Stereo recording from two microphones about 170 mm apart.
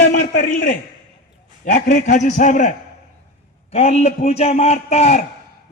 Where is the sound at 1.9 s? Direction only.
45° left (ahead or behind).